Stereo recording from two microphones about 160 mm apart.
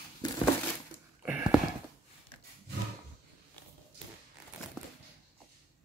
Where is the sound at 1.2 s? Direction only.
5° right (ahead or behind).